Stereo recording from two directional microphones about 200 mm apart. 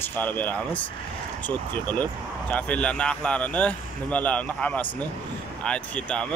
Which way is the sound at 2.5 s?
5° left (ahead or behind).